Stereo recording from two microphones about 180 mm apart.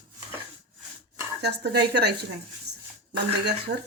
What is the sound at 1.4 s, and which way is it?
Speech, 65° right (ahead or behind).